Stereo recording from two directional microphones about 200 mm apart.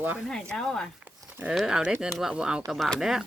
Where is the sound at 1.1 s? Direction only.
10° right (ahead or behind).